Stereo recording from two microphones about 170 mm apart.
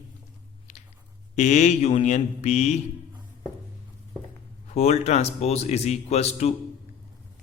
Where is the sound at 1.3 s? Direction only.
45° left (ahead or behind).